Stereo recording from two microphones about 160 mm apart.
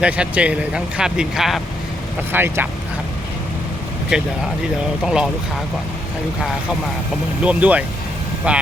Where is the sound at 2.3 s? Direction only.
15° right (ahead or behind).